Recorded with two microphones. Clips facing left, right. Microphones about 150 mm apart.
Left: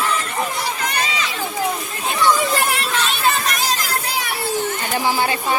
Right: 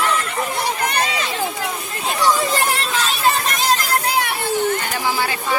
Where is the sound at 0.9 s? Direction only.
55° right (ahead or behind).